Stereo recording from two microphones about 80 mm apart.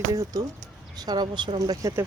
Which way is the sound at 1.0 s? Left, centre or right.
Right.